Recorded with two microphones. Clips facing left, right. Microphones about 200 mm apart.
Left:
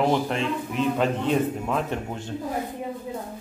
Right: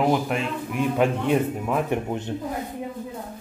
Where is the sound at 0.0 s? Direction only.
10° right (ahead or behind).